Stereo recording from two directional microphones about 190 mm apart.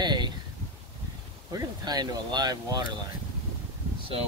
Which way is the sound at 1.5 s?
20° right (ahead or behind).